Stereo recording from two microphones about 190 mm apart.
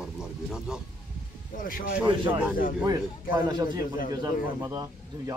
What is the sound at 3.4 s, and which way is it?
A man's voice, 20° right (ahead or behind).